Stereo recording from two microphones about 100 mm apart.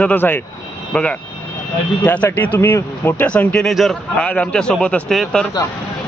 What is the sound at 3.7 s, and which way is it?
Speech, centre (ahead or behind).